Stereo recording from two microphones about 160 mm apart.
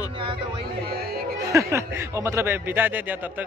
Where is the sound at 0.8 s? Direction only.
75° right (ahead or behind).